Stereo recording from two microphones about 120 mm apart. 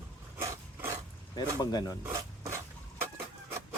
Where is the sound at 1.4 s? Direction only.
35° left (ahead or behind).